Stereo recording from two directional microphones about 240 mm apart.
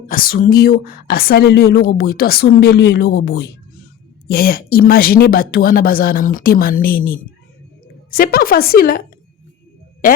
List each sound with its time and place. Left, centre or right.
0.1 s a woman's voice: left